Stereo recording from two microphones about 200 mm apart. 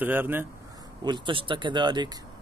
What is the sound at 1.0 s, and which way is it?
Speech, 25° right (ahead or behind).